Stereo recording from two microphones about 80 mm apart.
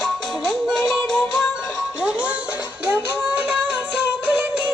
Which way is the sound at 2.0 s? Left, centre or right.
Centre.